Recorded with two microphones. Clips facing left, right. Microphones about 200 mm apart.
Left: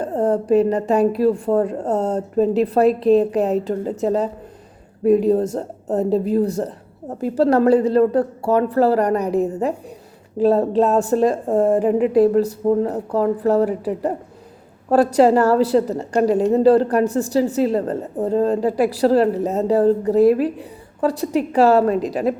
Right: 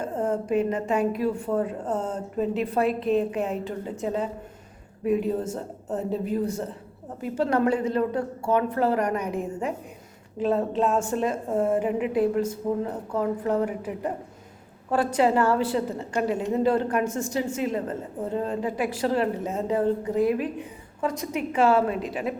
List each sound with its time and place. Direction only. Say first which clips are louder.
0.0 s a woman's voice: left 7 dB; 35° left (ahead or behind)